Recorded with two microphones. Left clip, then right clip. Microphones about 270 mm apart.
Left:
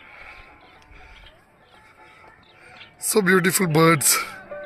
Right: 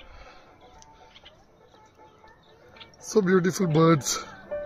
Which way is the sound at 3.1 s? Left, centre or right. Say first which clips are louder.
Left 4 dB; centre.